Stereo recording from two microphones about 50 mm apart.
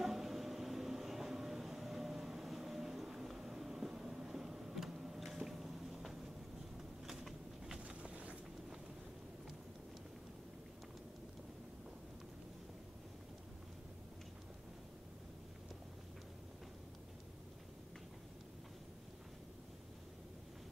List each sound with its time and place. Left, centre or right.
0.0 s train: centre
7.1 s a sound: centre
8.0 s vehicle: right